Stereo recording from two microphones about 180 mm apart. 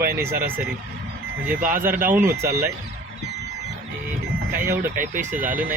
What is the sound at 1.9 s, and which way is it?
Speech, 50° right (ahead or behind).